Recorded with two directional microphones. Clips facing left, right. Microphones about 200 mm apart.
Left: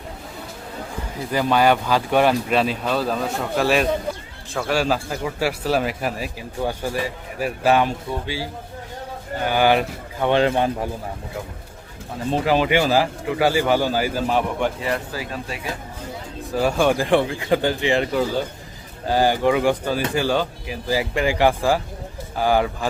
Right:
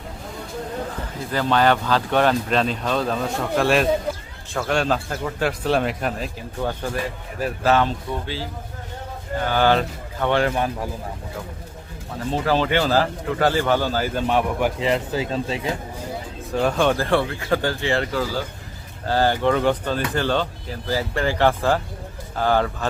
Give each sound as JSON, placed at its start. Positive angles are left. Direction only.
{"t": 1.3, "sound": "speech", "side_deg": 10}
{"t": 9.5, "sound": "speech", "side_deg": 15}
{"t": 12.3, "sound": "speech", "side_deg": 15}
{"t": 14.8, "sound": "speech", "side_deg": -20}
{"t": 16.5, "sound": "speech", "side_deg": 5}